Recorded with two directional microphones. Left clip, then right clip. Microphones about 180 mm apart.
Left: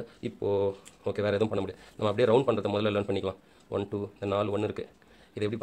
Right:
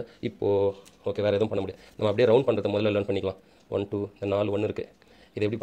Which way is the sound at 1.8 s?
15° right (ahead or behind).